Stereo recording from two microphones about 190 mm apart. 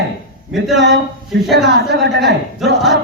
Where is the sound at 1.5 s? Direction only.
60° right (ahead or behind).